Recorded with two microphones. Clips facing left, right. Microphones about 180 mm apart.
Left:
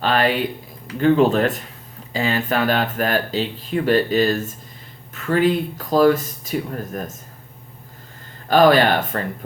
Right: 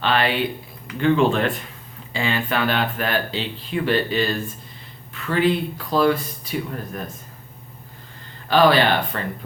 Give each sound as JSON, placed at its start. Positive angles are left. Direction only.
{"t": 0.0, "sound": "speech", "side_deg": 40}
{"t": 8.4, "sound": "speech", "side_deg": 45}